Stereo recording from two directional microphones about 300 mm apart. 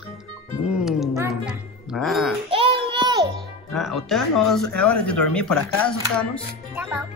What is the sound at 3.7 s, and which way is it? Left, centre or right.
Speech, centre.